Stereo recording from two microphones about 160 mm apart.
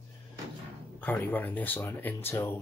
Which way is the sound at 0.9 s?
10° left (ahead or behind).